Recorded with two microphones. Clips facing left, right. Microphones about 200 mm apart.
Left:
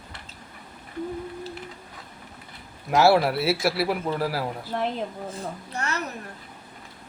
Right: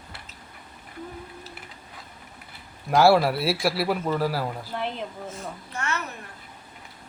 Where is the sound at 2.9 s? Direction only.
Centre (ahead or behind).